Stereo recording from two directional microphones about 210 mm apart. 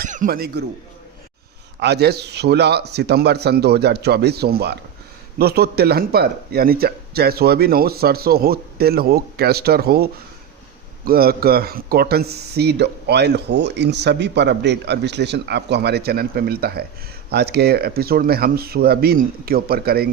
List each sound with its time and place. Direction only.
0.0 s a man's voice: 40° right (ahead or behind)
1.8 s speech: 50° right (ahead or behind)